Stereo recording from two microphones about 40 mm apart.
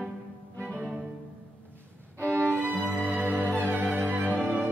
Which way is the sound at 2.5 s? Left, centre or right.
Right.